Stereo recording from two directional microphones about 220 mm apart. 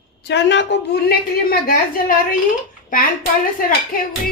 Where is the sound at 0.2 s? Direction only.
50° left (ahead or behind).